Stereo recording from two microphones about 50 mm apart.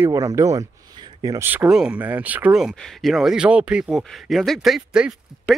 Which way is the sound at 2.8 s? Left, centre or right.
Centre.